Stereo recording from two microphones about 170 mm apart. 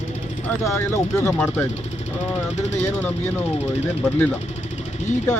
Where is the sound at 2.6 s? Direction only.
40° left (ahead or behind).